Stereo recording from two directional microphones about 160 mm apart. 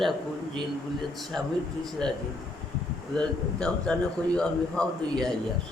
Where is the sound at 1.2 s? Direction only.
Centre (ahead or behind).